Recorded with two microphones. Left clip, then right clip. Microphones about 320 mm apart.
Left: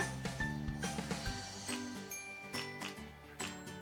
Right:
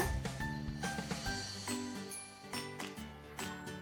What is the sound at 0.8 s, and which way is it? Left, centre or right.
Music, centre.